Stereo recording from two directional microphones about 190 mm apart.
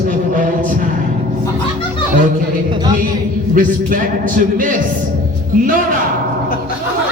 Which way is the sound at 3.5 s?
45° right (ahead or behind).